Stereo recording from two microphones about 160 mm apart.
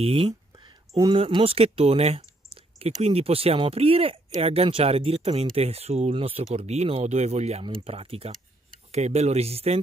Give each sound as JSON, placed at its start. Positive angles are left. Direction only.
{"t": 0.0, "sound": "speech", "side_deg": -35}
{"t": 0.3, "sound": "a sound", "side_deg": -25}
{"t": 3.0, "sound": "speech", "side_deg": -40}